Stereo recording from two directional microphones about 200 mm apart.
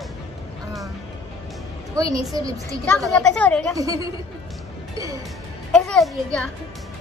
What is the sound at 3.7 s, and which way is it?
Speech, 15° right (ahead or behind).